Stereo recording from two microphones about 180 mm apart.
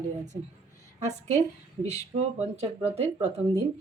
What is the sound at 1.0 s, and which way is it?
Speech, 40° right (ahead or behind).